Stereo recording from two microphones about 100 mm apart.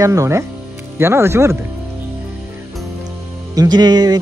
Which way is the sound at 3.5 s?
45° right (ahead or behind).